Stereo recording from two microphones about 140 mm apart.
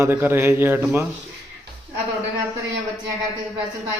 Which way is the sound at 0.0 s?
15° right (ahead or behind).